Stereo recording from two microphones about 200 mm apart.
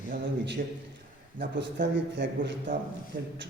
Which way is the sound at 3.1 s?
45° right (ahead or behind).